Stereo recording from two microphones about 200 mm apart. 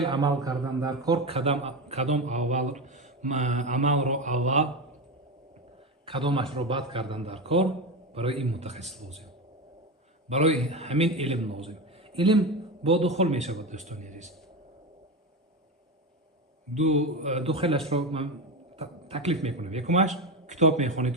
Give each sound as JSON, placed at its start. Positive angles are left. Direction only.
{"t": 0.0, "sound": "a man's voice", "side_deg": -20}
{"t": 6.1, "sound": "a man's voice", "side_deg": -25}
{"t": 10.2, "sound": "speech", "side_deg": -35}
{"t": 16.7, "sound": "speech", "side_deg": -35}